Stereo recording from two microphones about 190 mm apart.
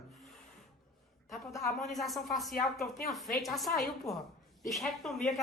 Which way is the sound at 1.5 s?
15° left (ahead or behind).